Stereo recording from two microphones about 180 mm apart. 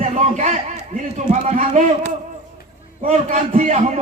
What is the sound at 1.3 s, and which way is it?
Speech, 45° right (ahead or behind).